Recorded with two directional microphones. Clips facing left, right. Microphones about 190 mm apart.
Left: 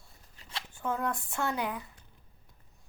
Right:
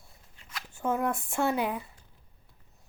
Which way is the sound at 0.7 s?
25° right (ahead or behind).